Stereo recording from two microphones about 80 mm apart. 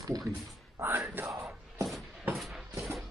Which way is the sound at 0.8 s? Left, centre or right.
Right.